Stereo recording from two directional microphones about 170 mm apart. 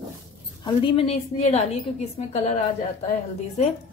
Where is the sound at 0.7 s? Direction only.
30° left (ahead or behind).